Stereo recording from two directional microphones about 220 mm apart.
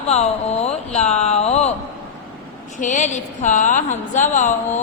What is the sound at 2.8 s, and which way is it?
A woman's voice, 35° left (ahead or behind).